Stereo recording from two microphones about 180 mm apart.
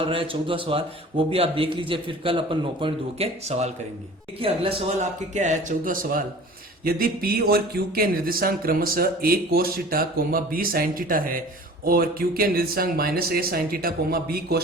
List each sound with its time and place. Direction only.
0.0 s a man's voice: 30° right (ahead or behind); by 14.6 s 60° right (ahead or behind)